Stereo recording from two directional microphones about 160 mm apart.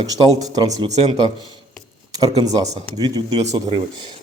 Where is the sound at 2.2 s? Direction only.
25° right (ahead or behind).